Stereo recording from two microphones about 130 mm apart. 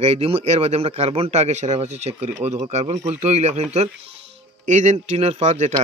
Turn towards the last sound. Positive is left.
turn(degrees=-60)  # may be behind; listen again after turning